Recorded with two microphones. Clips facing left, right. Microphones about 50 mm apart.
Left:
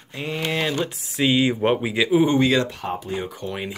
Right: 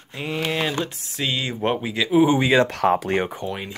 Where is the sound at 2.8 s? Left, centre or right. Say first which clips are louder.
Right 8 dB; right.